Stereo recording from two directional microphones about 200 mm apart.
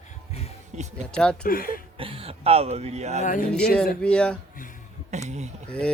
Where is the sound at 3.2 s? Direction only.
40° left (ahead or behind).